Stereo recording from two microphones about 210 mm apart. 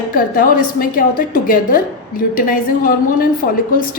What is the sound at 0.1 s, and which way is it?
A woman's voice, 40° left (ahead or behind).